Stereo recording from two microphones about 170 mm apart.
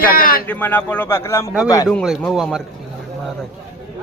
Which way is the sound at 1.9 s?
5° left (ahead or behind).